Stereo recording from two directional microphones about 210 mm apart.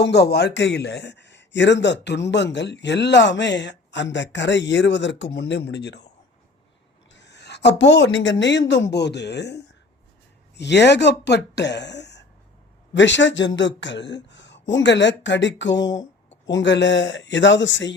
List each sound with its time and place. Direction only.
0.0 s speech: 50° left (ahead or behind)
7.1 s speech: 55° left (ahead or behind)